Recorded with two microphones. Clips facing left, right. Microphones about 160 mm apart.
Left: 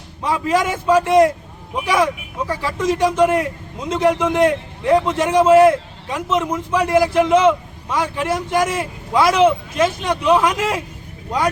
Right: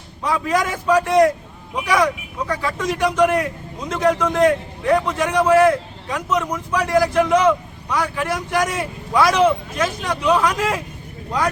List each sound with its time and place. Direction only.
0.2 s a man's voice: 25° left (ahead or behind)